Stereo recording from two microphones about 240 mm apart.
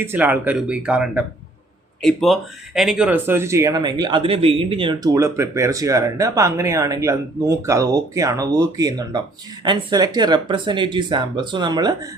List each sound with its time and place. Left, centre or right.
0.0 s speech: centre